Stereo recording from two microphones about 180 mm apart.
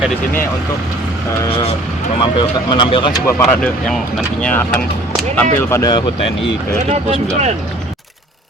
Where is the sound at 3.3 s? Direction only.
10° left (ahead or behind).